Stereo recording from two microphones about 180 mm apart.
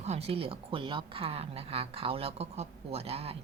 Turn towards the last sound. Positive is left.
turn(degrees=-35)  # may be behind; listen again after turning